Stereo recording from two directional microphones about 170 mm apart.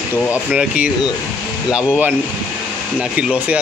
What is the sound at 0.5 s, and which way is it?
Speech, 5° right (ahead or behind).